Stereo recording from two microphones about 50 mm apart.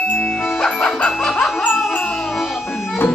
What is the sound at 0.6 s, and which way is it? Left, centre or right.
Music, centre.